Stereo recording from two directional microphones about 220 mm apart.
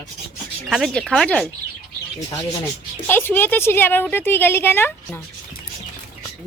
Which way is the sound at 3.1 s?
10° left (ahead or behind).